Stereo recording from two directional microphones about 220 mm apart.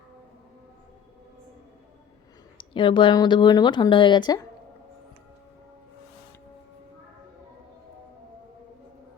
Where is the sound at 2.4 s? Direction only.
20° left (ahead or behind).